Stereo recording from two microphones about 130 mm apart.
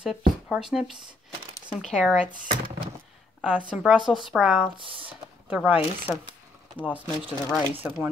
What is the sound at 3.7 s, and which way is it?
A woman's voice, 10° right (ahead or behind).